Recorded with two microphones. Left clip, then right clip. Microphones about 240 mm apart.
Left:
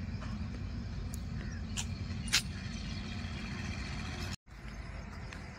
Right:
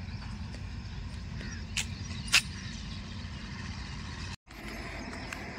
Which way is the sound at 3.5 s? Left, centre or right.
Left.